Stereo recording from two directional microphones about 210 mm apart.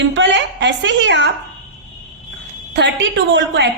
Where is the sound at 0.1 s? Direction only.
60° right (ahead or behind).